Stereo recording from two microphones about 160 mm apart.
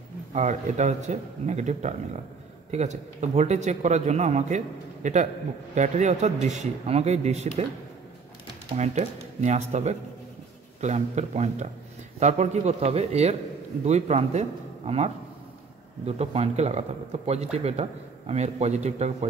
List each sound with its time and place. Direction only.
0.3 s speech: 45° right (ahead or behind)
8.7 s speech: 45° right (ahead or behind)
16.1 s speech: 40° right (ahead or behind)